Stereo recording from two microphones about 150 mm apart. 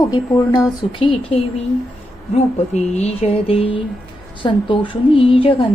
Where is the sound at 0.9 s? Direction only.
40° left (ahead or behind).